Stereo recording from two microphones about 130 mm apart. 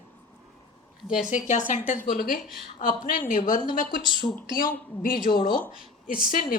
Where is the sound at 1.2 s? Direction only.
75° left (ahead or behind).